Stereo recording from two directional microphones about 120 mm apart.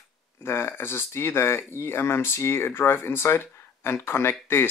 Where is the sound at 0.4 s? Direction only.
20° left (ahead or behind).